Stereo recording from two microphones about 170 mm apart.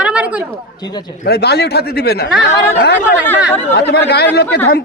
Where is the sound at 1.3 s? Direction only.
70° left (ahead or behind).